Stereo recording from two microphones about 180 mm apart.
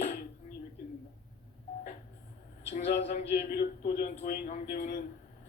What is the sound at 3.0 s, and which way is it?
Music, 40° left (ahead or behind).